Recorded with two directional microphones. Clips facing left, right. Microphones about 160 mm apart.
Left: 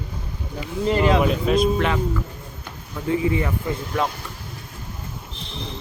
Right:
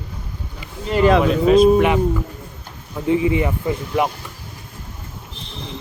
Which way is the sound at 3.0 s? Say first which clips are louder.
Right 4 dB; 20° right (ahead or behind).